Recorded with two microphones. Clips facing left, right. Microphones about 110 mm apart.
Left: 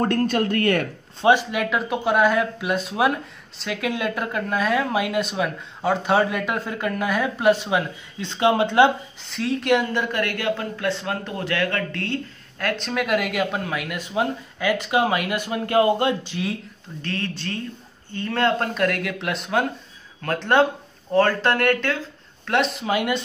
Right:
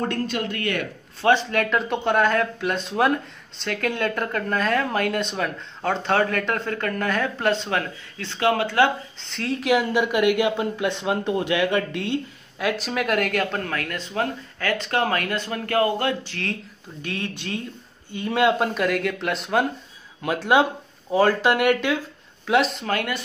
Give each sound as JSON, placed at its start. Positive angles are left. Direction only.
{"t": 0.0, "sound": "speech", "side_deg": 45}
{"t": 1.2, "sound": "speech", "side_deg": 10}
{"t": 9.2, "sound": "speech", "side_deg": 0}
{"t": 17.0, "sound": "speech", "side_deg": -15}
{"t": 22.5, "sound": "speech", "side_deg": 0}
{"t": 22.8, "sound": "speech", "side_deg": 15}